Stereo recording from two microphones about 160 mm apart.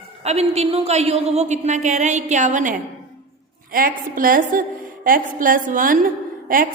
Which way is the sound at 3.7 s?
65° right (ahead or behind).